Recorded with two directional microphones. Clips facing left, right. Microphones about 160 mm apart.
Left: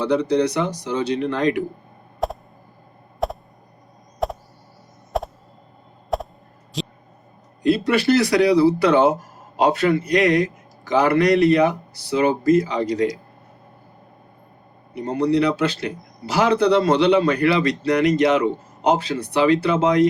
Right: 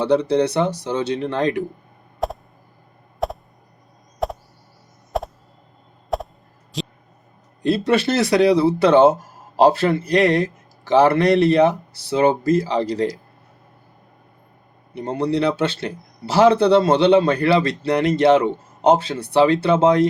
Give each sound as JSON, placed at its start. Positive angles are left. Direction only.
{"t": 0.0, "sound": "speech", "side_deg": -30}
{"t": 2.2, "sound": "a sound", "side_deg": 0}
{"t": 7.7, "sound": "speech", "side_deg": -25}
{"t": 14.9, "sound": "speech", "side_deg": -25}